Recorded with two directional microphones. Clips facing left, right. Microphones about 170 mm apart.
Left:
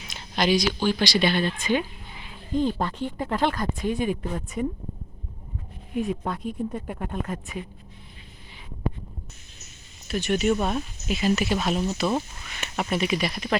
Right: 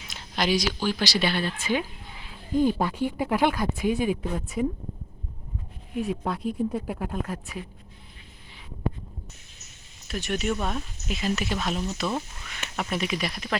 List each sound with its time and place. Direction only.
0.1 s a sound: 5° right (ahead or behind)
0.9 s speech: 5° right (ahead or behind)
5.9 s speech: centre (ahead or behind)
10.1 s speech: centre (ahead or behind)
10.5 s speech: 25° left (ahead or behind)
11.1 s speech: 5° left (ahead or behind)
12.5 s a sound: 5° left (ahead or behind)
12.9 s speech: centre (ahead or behind)